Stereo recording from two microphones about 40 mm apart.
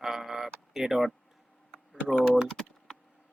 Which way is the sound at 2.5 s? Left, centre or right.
Centre.